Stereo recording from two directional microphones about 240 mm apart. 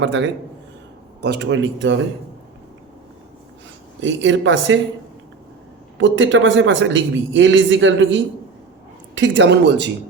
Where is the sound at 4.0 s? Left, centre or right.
Right.